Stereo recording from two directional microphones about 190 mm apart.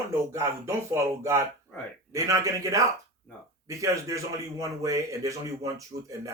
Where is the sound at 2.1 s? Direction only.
15° right (ahead or behind).